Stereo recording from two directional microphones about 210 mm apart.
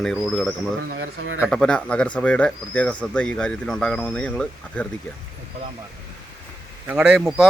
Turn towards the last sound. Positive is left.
turn(degrees=0)  # may be behind; listen again after turning